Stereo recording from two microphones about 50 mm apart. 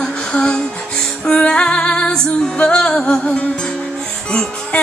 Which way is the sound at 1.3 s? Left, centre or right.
Centre.